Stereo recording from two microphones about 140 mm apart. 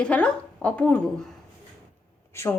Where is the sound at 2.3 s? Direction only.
20° left (ahead or behind).